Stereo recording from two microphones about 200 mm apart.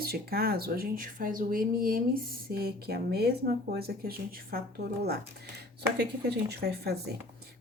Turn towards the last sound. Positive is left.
turn(degrees=-55)  # may be behind; listen again after turning